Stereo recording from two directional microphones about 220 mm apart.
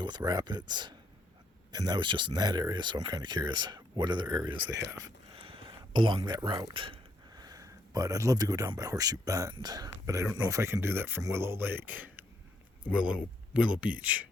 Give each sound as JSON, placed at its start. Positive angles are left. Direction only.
{"t": 0.0, "sound": "speech", "side_deg": -20}
{"t": 4.9, "sound": "a sound", "side_deg": -20}
{"t": 6.7, "sound": "speech", "side_deg": -25}